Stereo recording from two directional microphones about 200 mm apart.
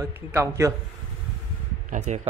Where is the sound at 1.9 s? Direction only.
35° right (ahead or behind).